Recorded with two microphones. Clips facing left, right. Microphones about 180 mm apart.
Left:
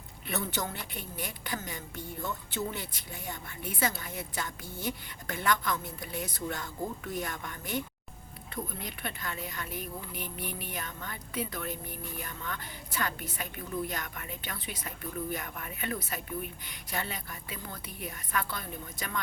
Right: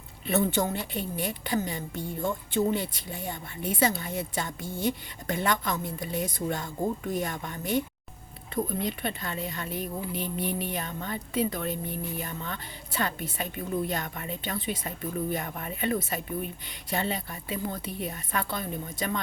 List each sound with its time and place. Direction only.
0.3 s speech: 25° right (ahead or behind)